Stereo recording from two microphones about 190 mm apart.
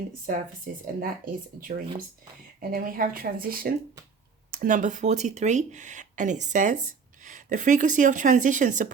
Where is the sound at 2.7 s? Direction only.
50° right (ahead or behind).